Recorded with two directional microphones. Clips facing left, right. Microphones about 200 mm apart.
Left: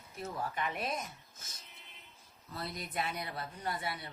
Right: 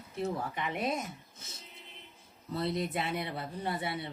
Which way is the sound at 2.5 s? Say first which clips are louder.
Right 7 dB; 25° right (ahead or behind).